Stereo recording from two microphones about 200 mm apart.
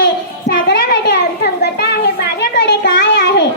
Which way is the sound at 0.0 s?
60° left (ahead or behind).